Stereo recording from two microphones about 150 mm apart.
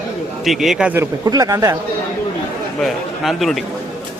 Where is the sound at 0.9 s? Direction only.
20° right (ahead or behind).